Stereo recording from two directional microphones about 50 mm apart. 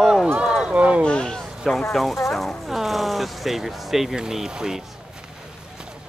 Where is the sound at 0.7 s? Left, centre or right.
Right.